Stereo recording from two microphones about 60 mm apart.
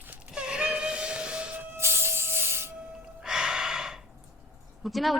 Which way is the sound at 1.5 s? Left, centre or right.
Right.